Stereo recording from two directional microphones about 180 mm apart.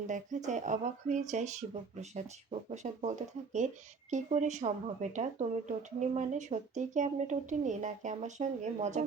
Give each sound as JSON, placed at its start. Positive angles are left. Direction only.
{"t": 0.1, "sound": "speech", "side_deg": -40}